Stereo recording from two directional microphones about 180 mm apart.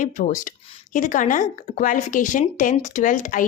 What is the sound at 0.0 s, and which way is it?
Speech, 45° left (ahead or behind).